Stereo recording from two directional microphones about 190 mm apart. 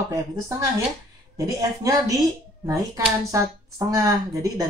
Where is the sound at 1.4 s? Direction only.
20° right (ahead or behind).